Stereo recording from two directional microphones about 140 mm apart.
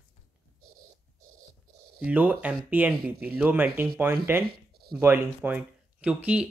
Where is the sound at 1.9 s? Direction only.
10° right (ahead or behind).